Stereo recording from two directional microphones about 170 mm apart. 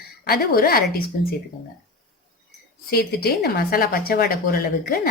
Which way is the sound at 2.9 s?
65° left (ahead or behind).